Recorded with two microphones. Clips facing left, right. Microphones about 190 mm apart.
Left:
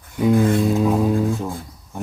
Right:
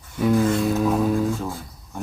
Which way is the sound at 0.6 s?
20° left (ahead or behind).